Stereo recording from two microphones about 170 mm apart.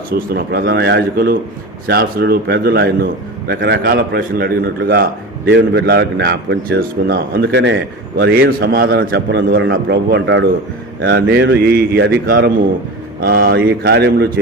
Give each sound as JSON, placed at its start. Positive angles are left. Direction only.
{"t": 0.1, "sound": "a man's voice", "side_deg": -65}
{"t": 5.5, "sound": "a man's voice", "side_deg": -90}
{"t": 13.1, "sound": "a man's voice", "side_deg": -65}